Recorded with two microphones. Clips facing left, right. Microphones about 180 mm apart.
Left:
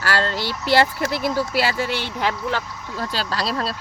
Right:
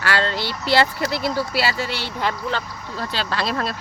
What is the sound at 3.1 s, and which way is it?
Speech, 40° left (ahead or behind).